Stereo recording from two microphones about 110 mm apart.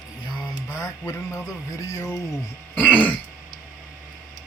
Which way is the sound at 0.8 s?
30° left (ahead or behind).